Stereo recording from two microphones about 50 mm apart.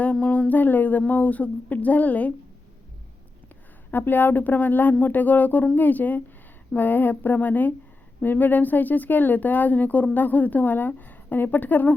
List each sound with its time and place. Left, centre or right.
0.0 s speech: left
3.9 s speech: left